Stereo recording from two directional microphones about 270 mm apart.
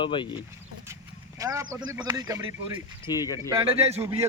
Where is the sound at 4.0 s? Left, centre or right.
Centre.